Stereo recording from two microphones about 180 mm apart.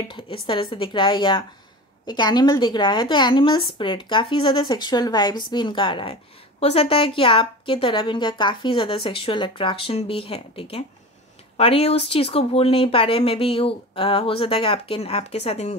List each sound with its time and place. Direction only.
0.1 s a woman's voice: 30° left (ahead or behind)